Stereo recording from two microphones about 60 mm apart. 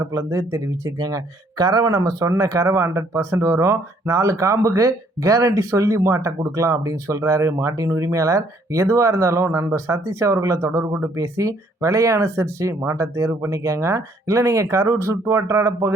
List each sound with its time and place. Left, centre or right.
0.0 s speech: right